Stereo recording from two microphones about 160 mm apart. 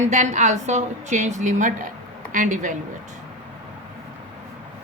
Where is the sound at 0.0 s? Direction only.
50° right (ahead or behind).